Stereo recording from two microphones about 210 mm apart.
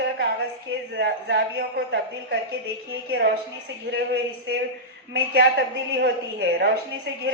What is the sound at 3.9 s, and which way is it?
Speech, 50° right (ahead or behind).